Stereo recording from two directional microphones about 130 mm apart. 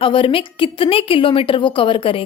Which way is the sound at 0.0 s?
45° left (ahead or behind).